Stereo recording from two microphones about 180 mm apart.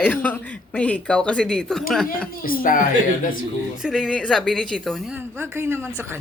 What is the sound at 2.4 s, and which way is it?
Speech, 55° left (ahead or behind).